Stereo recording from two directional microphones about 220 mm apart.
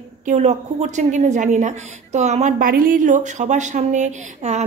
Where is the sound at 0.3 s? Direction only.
30° right (ahead or behind).